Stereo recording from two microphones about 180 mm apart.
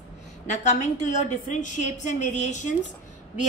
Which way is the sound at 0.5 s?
40° left (ahead or behind).